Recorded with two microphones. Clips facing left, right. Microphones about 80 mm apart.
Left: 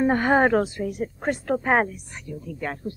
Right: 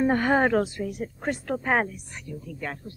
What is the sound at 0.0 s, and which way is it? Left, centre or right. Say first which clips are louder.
Speech: left 2 dB; left.